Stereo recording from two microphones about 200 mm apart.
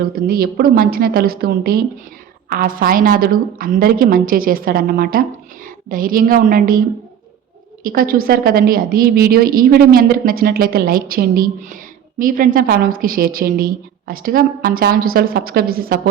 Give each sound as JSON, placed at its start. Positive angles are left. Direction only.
{"t": 0.3, "sound": "a woman's voice", "side_deg": -50}
{"t": 7.9, "sound": "a woman's voice", "side_deg": -45}